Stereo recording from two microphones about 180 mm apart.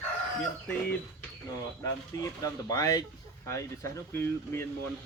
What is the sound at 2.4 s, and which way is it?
Speech, 20° left (ahead or behind).